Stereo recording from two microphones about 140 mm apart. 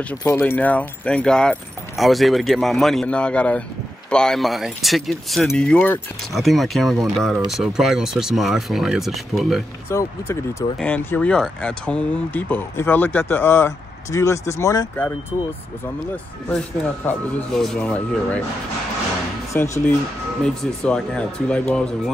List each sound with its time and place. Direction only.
0.4 s speech: 10° left (ahead or behind)
9.8 s speech: 20° left (ahead or behind)
16.4 s speech: 10° left (ahead or behind)
19.6 s speech: 15° left (ahead or behind)